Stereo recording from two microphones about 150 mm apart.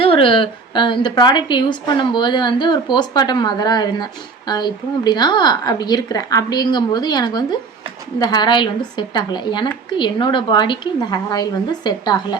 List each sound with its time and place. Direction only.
0.0 s a woman's voice: 35° left (ahead or behind)